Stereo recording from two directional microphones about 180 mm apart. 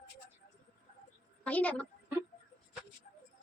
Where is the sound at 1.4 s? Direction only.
10° left (ahead or behind).